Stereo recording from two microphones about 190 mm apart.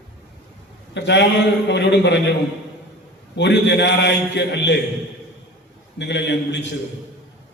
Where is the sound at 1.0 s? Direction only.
65° left (ahead or behind).